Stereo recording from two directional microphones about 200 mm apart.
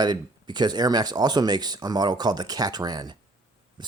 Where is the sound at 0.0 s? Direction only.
20° right (ahead or behind).